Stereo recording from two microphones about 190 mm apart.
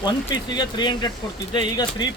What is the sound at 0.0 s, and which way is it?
Speech, 20° left (ahead or behind).